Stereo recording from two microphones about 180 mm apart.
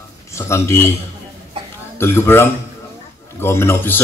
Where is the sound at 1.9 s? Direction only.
15° left (ahead or behind).